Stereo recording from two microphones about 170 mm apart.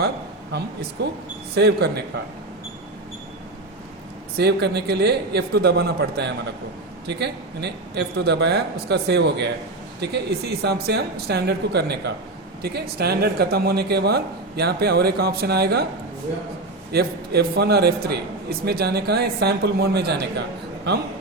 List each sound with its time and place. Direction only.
1.0 s a man's voice: 85° right
4.4 s a man's voice: 75° right (ahead or behind)
16.9 s speech: 65° right (ahead or behind)